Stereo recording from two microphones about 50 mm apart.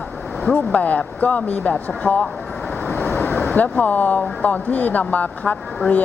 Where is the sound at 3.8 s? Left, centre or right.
Left.